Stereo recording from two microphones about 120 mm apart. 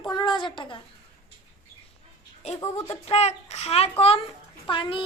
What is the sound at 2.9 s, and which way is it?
Speech, 60° left (ahead or behind).